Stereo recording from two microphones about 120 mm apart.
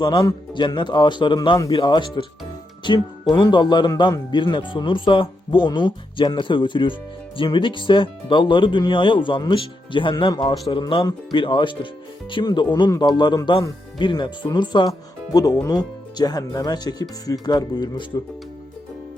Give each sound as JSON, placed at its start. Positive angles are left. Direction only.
{"t": 0.0, "sound": "speech", "side_deg": 30}
{"t": 1.5, "sound": "a man's voice", "side_deg": 25}
{"t": 1.8, "sound": "speech", "side_deg": 40}
{"t": 3.3, "sound": "speech", "side_deg": 35}